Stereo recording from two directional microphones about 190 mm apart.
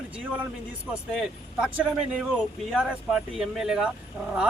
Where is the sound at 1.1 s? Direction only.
5° right (ahead or behind).